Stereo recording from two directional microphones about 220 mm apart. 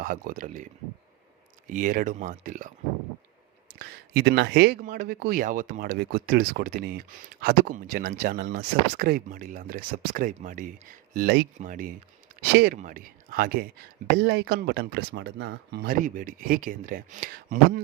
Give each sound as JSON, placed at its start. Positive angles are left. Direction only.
{"t": 0.0, "sound": "speech", "side_deg": -40}
{"t": 3.8, "sound": "speech", "side_deg": -45}
{"t": 4.8, "sound": "speech", "side_deg": -40}